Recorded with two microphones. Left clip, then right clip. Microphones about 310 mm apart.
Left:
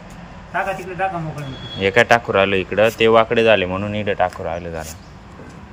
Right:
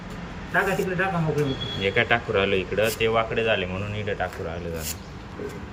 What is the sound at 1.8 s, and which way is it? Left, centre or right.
Speech, centre.